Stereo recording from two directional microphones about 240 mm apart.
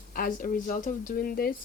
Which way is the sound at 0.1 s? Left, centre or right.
Left.